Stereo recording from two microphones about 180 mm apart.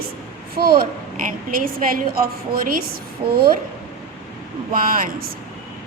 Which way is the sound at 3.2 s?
30° right (ahead or behind).